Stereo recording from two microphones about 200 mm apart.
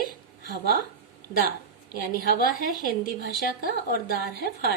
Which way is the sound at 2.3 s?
45° left (ahead or behind).